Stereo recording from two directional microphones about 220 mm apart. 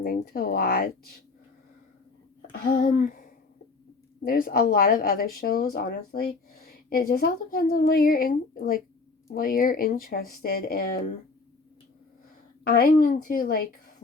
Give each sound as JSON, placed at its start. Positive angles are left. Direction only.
{"t": 0.0, "sound": "speech", "side_deg": 40}
{"t": 2.5, "sound": "a woman's voice", "side_deg": 45}
{"t": 12.6, "sound": "a woman's voice", "side_deg": 45}